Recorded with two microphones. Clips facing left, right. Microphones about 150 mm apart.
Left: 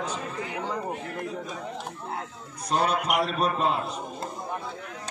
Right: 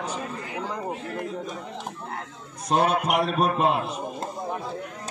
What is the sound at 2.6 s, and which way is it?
A man's voice, 50° right (ahead or behind).